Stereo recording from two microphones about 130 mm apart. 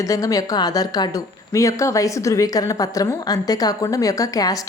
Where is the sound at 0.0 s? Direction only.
25° left (ahead or behind).